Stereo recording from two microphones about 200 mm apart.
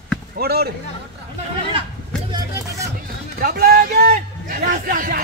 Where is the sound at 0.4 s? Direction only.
50° right (ahead or behind).